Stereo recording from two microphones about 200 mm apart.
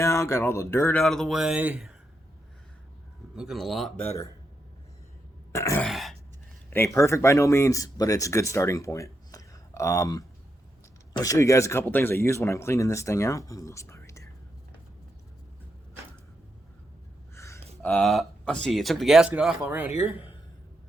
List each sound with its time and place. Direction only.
0.0 s speech: 15° left (ahead or behind); by 1.9 s 10° right (ahead or behind)
3.3 s speech: centre (ahead or behind)
5.5 s throat clearing: 15° left (ahead or behind)
5.9 s throat clearing: centre (ahead or behind)
6.7 s speech: 15° left (ahead or behind)
17.3 s gasp: 15° left (ahead or behind)
17.8 s speech: 5° left (ahead or behind)